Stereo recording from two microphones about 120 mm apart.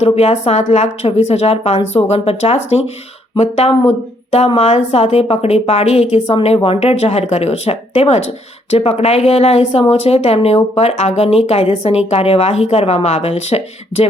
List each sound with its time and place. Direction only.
0.0 s speech: 60° left (ahead or behind)